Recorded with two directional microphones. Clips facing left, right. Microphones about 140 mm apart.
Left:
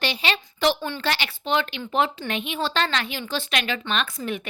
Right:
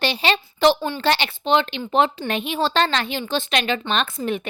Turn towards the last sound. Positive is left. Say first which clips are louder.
# right 4 dB
turn(degrees=-30)  # may be behind; listen again after turning